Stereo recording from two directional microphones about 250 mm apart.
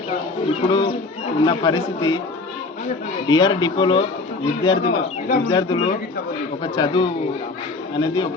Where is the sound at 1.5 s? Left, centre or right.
Centre.